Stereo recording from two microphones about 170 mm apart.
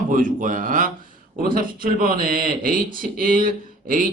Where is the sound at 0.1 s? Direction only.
50° right (ahead or behind).